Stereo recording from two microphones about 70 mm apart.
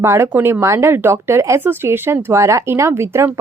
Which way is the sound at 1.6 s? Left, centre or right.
Right.